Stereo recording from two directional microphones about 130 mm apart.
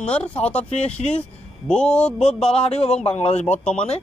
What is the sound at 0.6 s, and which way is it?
Speech, 55° left (ahead or behind).